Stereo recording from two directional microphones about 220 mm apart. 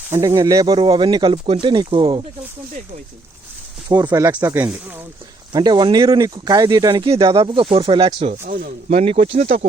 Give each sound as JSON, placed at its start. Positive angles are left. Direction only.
{"t": 0.1, "sound": "speech", "side_deg": -15}
{"t": 3.8, "sound": "speech", "side_deg": -20}
{"t": 5.5, "sound": "speech", "side_deg": -20}
{"t": 8.4, "sound": "speech", "side_deg": -45}
{"t": 8.9, "sound": "speech", "side_deg": -30}